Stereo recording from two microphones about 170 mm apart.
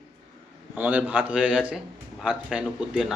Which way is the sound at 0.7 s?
10° right (ahead or behind).